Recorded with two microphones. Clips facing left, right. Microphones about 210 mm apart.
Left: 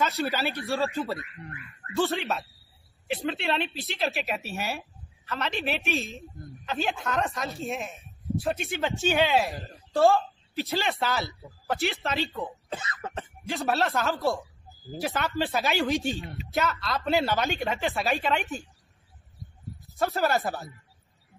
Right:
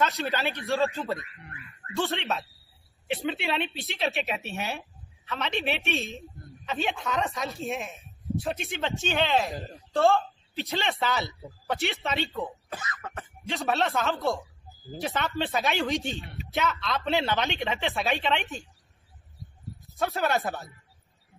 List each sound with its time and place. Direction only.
0.0 s a woman's voice: 5° left (ahead or behind)
2.0 s a woman's voice: centre (ahead or behind)
12.6 s cough: 20° left (ahead or behind)
13.5 s a woman's voice: centre (ahead or behind)
20.0 s a woman's voice: centre (ahead or behind)